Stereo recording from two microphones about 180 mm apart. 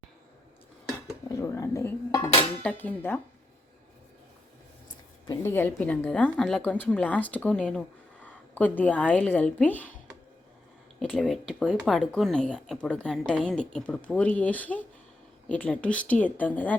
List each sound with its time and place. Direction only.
1.3 s speech: 20° left (ahead or behind)
2.6 s speech: 10° left (ahead or behind)
5.2 s speech: 15° left (ahead or behind)
11.0 s a woman's voice: centre (ahead or behind)